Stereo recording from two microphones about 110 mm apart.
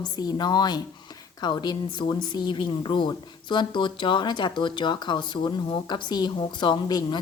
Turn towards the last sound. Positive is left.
turn(degrees=40)  # may be behind; listen again after turning